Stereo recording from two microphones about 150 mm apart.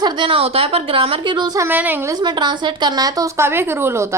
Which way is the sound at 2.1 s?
30° right (ahead or behind).